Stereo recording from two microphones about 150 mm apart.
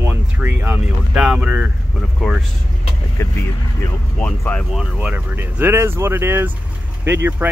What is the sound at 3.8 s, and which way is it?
Speech, 15° left (ahead or behind).